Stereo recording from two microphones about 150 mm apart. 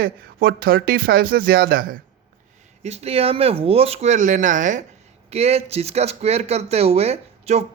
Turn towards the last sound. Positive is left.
turn(degrees=-45)  # may be behind; listen again after turning